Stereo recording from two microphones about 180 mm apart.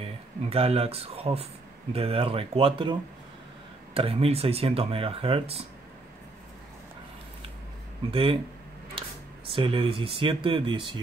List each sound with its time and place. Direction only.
0.0 s speech: 35° right (ahead or behind)
8.1 s speech: 30° right (ahead or behind)
9.5 s speech: 30° right (ahead or behind)